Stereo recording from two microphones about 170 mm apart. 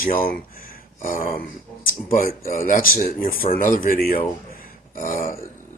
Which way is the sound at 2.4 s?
55° left (ahead or behind).